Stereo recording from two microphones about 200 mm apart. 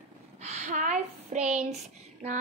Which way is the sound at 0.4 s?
35° right (ahead or behind).